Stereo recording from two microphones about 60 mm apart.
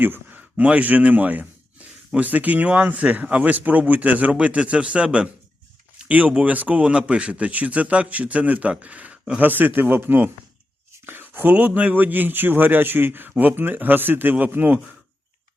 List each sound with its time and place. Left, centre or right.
0.0 s a man's voice: right
9.4 s speech: right